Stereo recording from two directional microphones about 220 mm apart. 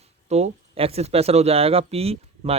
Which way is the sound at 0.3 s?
30° right (ahead or behind).